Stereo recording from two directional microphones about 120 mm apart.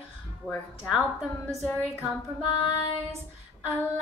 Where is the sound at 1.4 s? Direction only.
15° left (ahead or behind).